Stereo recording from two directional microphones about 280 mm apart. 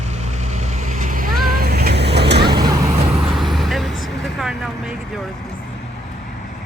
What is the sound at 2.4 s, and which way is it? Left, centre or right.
Vehicle, centre.